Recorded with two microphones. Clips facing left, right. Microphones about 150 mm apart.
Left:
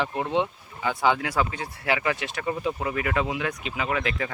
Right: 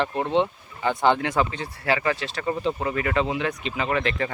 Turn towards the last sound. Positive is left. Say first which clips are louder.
# right 3 dB
turn(degrees=5)  # may be behind; listen again after turning